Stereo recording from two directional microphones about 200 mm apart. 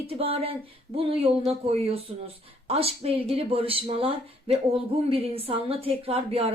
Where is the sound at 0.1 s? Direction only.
30° right (ahead or behind).